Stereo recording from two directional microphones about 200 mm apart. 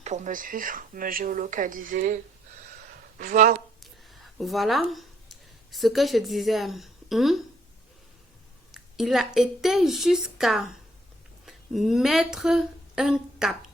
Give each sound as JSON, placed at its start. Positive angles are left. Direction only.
{"t": 0.0, "sound": "speech", "side_deg": -40}
{"t": 3.2, "sound": "speech", "side_deg": -40}
{"t": 3.8, "sound": "a sound", "side_deg": 0}
{"t": 5.7, "sound": "a woman's voice", "side_deg": 0}
{"t": 8.7, "sound": "a woman's voice", "side_deg": 0}